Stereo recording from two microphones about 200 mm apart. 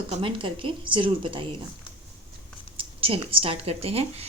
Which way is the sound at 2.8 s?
25° right (ahead or behind).